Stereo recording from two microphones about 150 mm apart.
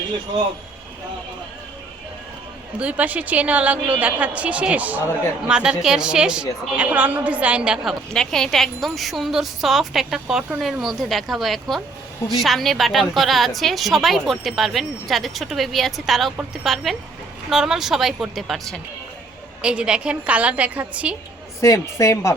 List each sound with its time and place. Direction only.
2.7 s a woman's voice: 10° right (ahead or behind)
8.1 s a woman's voice: 5° left (ahead or behind)
21.6 s speech: 20° left (ahead or behind)